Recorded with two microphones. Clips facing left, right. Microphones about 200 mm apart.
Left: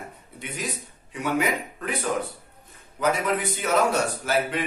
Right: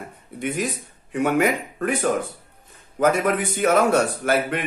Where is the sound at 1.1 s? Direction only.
50° right (ahead or behind).